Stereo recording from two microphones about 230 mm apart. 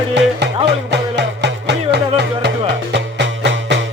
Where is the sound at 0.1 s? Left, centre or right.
Right.